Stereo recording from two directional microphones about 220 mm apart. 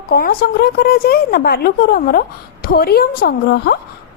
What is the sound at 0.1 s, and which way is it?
Speech, 45° left (ahead or behind).